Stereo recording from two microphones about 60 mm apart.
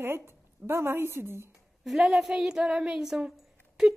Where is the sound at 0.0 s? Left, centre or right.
Right.